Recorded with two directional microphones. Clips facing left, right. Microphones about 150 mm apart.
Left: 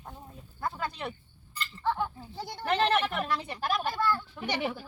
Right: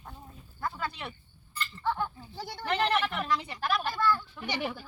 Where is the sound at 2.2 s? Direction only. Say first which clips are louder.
Left 1 dB; 25° left (ahead or behind).